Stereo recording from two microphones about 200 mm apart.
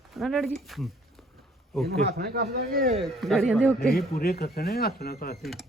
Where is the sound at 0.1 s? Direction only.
Centre (ahead or behind).